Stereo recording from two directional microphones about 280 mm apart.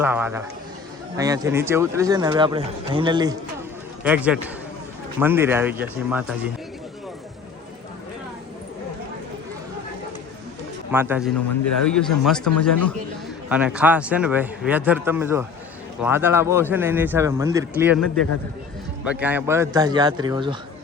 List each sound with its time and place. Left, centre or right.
0.0 s speech: centre
4.0 s a man's voice: centre
10.9 s speech: centre
11.3 s a man's voice: left
11.9 s a man's voice: centre
12.5 s a man's voice: left
13.5 s a man's voice: centre
19.0 s speech: centre